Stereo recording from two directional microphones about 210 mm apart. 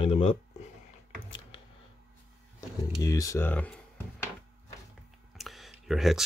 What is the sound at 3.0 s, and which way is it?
Speech, 15° left (ahead or behind).